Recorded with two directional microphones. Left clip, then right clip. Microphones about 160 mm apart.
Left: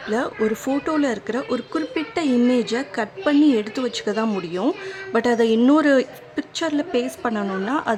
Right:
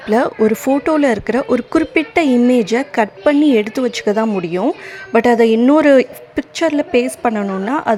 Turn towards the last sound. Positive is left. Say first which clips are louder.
# right 6 dB
turn(degrees=-25)  # may be behind; listen again after turning